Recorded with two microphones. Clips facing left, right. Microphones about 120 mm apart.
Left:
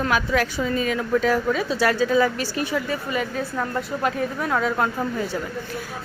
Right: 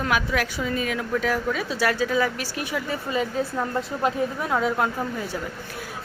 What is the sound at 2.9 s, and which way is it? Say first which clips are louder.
A woman's voice: even; 20° right (ahead or behind).